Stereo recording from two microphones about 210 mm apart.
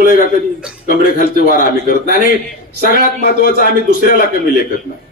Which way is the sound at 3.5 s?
45° left (ahead or behind).